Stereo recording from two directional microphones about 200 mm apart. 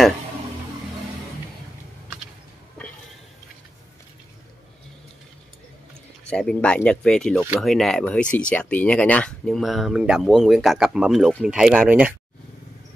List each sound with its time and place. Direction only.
6.3 s speech: 5° left (ahead or behind)